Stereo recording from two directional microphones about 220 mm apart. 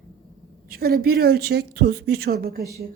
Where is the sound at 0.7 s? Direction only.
45° right (ahead or behind).